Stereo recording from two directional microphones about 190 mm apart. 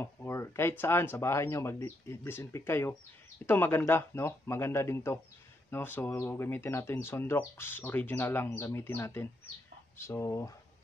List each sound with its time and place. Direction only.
0.0 s speech: 15° left (ahead or behind)